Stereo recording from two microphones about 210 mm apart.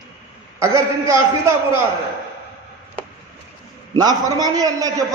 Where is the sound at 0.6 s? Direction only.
15° right (ahead or behind).